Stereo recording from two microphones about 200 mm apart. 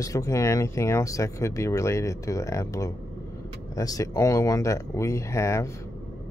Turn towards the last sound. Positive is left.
turn(degrees=15)  # may be behind; listen again after turning